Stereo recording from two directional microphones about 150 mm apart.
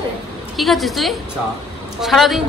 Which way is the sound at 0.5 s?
Centre (ahead or behind).